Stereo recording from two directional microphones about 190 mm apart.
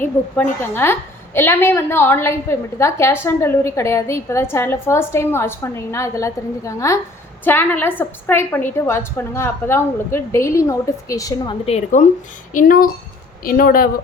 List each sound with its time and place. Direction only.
0.0 s a woman's voice: 10° left (ahead or behind)
11.6 s a woman's voice: 35° left (ahead or behind)
12.5 s speech: 45° left (ahead or behind)